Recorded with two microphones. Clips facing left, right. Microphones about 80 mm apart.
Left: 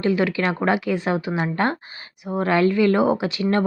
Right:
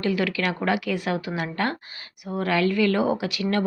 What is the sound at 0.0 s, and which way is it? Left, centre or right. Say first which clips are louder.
Speech: left 4 dB; left.